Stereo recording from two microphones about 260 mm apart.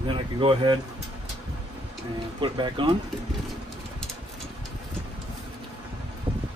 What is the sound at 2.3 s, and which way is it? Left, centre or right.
Speech, centre.